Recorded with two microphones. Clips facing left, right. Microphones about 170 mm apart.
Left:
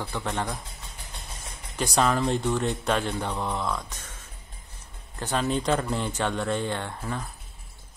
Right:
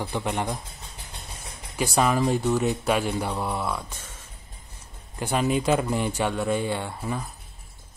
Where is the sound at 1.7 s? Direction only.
5° right (ahead or behind).